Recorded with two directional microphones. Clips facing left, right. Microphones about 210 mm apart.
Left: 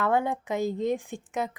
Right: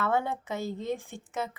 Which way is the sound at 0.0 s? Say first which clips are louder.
Left 3 dB; 15° left (ahead or behind).